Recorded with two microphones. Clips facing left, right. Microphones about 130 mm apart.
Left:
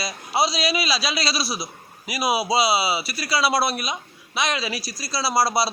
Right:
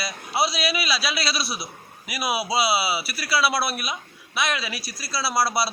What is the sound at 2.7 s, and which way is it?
A man's voice, 25° left (ahead or behind).